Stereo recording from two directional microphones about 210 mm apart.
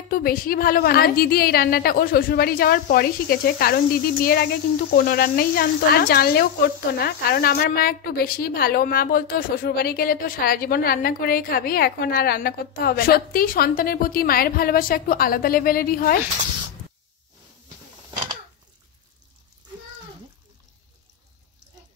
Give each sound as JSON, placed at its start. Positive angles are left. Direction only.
{"t": 0.1, "sound": "speech", "side_deg": 45}